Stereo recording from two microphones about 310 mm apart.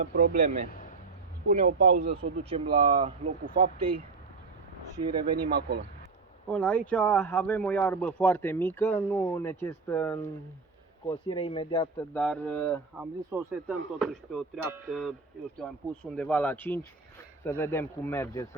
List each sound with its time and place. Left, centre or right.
0.0 s speech: right
5.5 s speech: right
6.5 s speech: centre
11.9 s speech: centre